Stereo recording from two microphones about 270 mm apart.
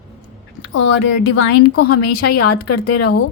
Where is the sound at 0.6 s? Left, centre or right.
Left.